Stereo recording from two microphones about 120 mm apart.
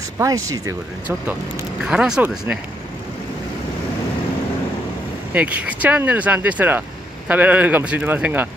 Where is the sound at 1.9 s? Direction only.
5° right (ahead or behind).